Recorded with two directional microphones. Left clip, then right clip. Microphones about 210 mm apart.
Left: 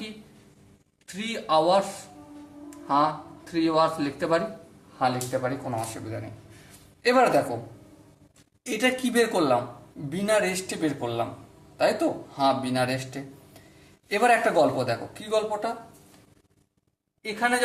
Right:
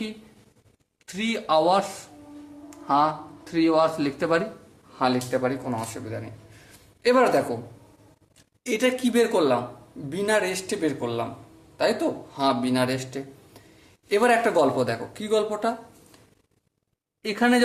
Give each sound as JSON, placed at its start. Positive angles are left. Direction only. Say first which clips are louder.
{"t": 1.0, "sound": "speech", "louder": "right 3 dB", "side_deg": -30}
{"t": 5.7, "sound": "speech", "louder": "even", "side_deg": -15}
{"t": 8.6, "sound": "speech", "louder": "right 2 dB", "side_deg": -15}
{"t": 17.2, "sound": "speech", "louder": "right 3 dB", "side_deg": -50}